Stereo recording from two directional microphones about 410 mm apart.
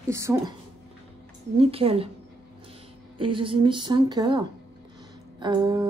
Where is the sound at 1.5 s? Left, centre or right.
Centre.